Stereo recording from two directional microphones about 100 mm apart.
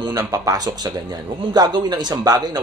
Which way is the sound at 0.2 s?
35° right (ahead or behind).